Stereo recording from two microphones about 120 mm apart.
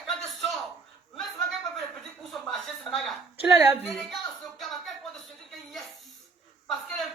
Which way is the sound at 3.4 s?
15° right (ahead or behind).